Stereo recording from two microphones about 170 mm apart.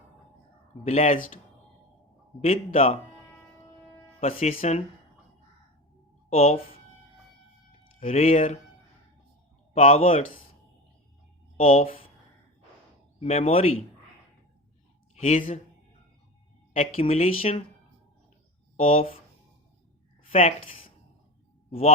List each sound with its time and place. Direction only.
0.9 s speech: 45° left (ahead or behind)
2.4 s speech: 35° left (ahead or behind)
4.3 s speech: 40° left (ahead or behind)
6.3 s speech: 35° left (ahead or behind)
8.0 s speech: 40° left (ahead or behind)
9.7 s speech: 35° left (ahead or behind)
11.5 s speech: 35° left (ahead or behind)
13.1 s speech: 40° left (ahead or behind)
15.1 s speech: 40° left (ahead or behind)
16.7 s speech: 35° left (ahead or behind)
18.8 s speech: 35° left (ahead or behind)
21.7 s speech: 35° left (ahead or behind)